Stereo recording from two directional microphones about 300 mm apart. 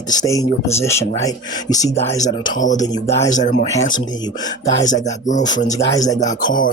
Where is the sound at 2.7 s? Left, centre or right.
Centre.